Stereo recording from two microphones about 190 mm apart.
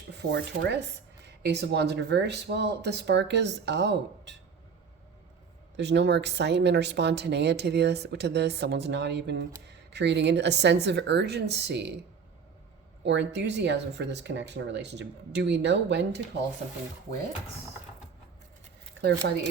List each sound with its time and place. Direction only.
0.2 s speech: 65° right (ahead or behind)
5.7 s speech: 65° right (ahead or behind)
13.1 s speech: 65° right (ahead or behind)